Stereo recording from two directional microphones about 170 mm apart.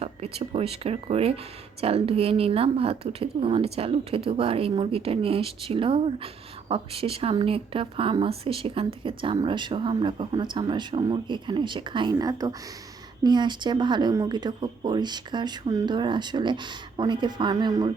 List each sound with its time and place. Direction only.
0.0 s a woman's voice: 35° right (ahead or behind)